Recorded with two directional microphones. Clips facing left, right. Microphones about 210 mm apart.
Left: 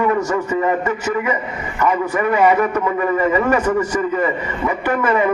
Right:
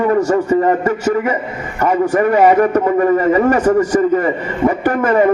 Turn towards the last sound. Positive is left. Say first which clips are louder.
# right 4 dB
turn(degrees=-45)  # may be behind; listen again after turning